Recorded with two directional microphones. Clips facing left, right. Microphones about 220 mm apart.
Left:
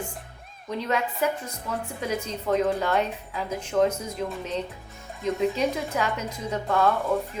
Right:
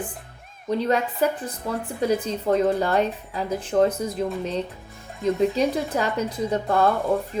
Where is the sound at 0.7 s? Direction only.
35° right (ahead or behind).